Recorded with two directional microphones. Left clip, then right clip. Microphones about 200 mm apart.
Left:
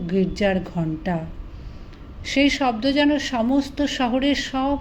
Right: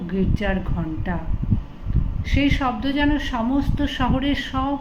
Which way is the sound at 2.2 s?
40° left (ahead or behind).